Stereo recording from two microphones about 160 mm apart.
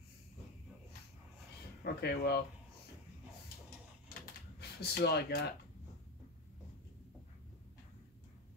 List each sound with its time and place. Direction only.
1.9 s speech: 90° left
4.6 s speech: 90° left